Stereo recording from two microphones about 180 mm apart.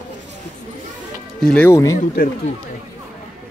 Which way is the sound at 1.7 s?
15° left (ahead or behind).